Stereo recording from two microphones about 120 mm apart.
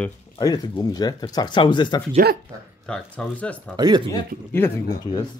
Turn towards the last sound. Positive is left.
turn(degrees=35)  # may be behind; listen again after turning